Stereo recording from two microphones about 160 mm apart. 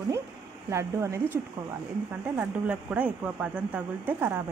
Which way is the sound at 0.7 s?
20° right (ahead or behind).